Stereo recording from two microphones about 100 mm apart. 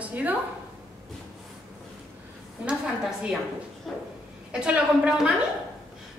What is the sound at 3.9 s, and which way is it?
Speech, centre (ahead or behind).